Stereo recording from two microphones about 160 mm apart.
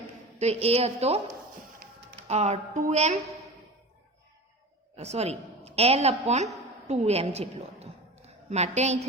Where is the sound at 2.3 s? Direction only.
40° right (ahead or behind).